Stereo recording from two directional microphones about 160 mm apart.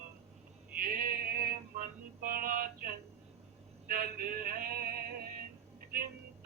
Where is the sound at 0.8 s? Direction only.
65° right (ahead or behind).